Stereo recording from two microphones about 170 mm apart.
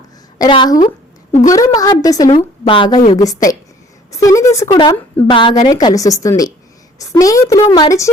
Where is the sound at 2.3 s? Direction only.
30° left (ahead or behind).